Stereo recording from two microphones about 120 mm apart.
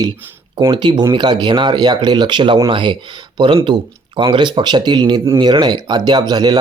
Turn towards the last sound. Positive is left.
turn(degrees=-35)  # may be behind; listen again after turning